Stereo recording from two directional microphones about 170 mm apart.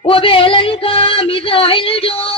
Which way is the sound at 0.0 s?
35° left (ahead or behind).